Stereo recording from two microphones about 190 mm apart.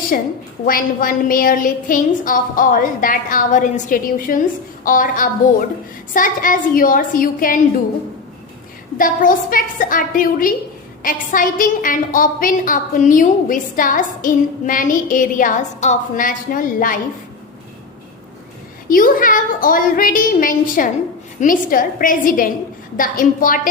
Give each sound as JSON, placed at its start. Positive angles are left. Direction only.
{"t": 0.1, "sound": "a woman's voice", "side_deg": 50}
{"t": 9.0, "sound": "a woman's voice", "side_deg": 45}
{"t": 18.9, "sound": "a woman's voice", "side_deg": 45}